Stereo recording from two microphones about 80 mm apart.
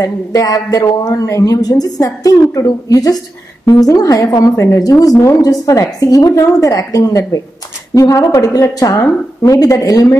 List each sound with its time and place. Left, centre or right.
0.0 s a woman's voice: left